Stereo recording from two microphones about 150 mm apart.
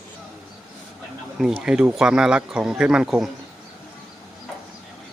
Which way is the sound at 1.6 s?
5° right (ahead or behind).